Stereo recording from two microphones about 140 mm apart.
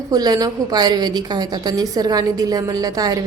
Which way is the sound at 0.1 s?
25° right (ahead or behind).